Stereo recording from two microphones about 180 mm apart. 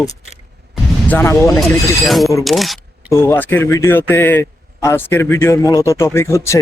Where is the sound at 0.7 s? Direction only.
10° left (ahead or behind).